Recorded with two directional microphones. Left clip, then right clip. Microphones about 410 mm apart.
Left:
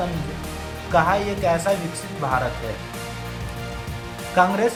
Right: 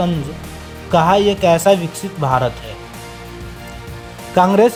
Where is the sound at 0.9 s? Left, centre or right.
Centre.